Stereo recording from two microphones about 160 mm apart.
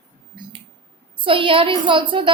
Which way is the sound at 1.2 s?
35° right (ahead or behind).